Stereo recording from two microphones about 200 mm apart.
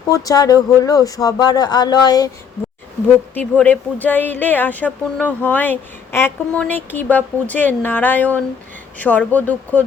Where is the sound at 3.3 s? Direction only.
10° left (ahead or behind).